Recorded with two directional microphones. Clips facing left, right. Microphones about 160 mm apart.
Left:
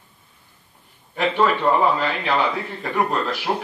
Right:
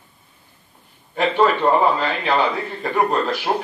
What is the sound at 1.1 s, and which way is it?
Speech, 30° right (ahead or behind).